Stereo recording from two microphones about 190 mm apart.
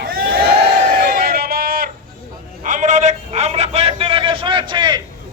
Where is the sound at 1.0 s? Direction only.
55° right (ahead or behind).